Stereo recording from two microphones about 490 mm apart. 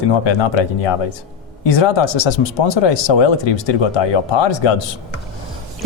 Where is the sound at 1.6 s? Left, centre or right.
Left.